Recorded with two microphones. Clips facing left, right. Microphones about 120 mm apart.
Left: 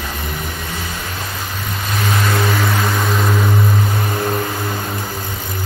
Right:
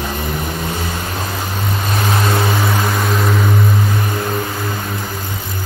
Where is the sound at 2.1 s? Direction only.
25° right (ahead or behind).